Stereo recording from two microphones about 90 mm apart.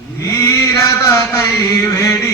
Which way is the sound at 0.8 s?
35° left (ahead or behind).